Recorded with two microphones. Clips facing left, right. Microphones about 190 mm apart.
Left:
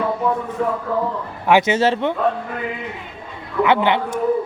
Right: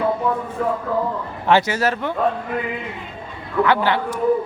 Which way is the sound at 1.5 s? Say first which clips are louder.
Left 2 dB; 20° left (ahead or behind).